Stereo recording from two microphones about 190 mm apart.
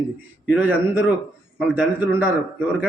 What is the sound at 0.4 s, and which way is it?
A man's voice, 10° right (ahead or behind).